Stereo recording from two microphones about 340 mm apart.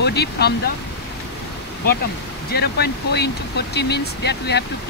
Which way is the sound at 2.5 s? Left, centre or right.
Left.